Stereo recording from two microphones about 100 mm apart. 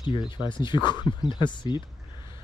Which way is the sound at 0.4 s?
50° left (ahead or behind).